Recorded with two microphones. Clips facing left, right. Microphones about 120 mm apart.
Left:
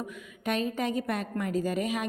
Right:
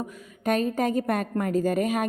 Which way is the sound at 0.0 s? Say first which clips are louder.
Right 5 dB; 45° right (ahead or behind).